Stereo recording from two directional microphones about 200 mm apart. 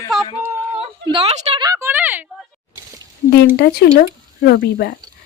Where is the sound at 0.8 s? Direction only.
25° right (ahead or behind); by 2.2 s 10° right (ahead or behind).